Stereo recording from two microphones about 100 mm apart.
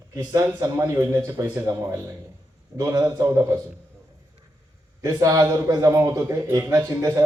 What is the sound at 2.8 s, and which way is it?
Speech, 35° right (ahead or behind).